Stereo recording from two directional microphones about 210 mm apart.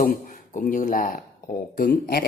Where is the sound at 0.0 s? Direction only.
40° left (ahead or behind).